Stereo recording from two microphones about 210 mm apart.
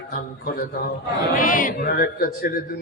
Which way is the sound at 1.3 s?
40° left (ahead or behind).